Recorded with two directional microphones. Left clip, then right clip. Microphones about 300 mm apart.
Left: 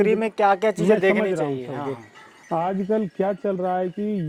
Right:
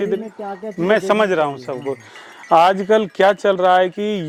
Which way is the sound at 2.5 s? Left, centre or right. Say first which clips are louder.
Right 11 dB; centre.